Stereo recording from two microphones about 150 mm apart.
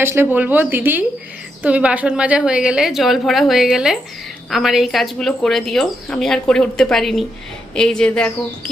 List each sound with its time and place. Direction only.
0.0 s speech: 15° right (ahead or behind); by 8.3 s 5° left (ahead or behind)